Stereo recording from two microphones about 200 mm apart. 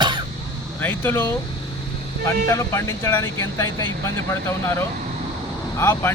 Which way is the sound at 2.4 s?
15° left (ahead or behind).